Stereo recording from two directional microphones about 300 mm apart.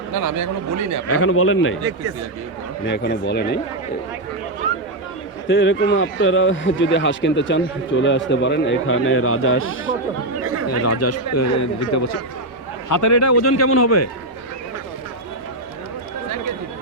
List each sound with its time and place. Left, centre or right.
0.1 s a man's voice: right
1.0 s a man's voice: left
2.8 s speech: left
5.5 s speech: left
10.7 s speech: left